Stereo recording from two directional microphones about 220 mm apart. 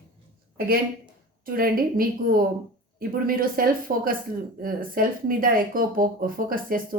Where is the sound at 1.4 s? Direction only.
40° right (ahead or behind).